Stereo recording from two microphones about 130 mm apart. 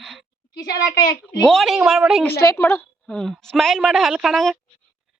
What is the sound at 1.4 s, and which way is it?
Speech, 5° left (ahead or behind).